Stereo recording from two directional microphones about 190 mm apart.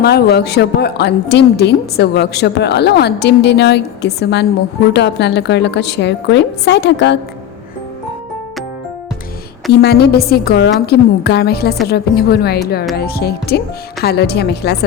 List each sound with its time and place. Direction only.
0.0 s a woman's voice: 55° left (ahead or behind)
9.7 s a woman's voice: 60° left (ahead or behind)